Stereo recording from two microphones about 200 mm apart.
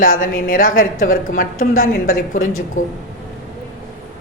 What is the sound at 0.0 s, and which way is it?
A woman's voice, 45° left (ahead or behind).